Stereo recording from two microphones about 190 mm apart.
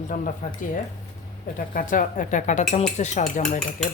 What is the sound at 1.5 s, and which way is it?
Speech, 45° left (ahead or behind).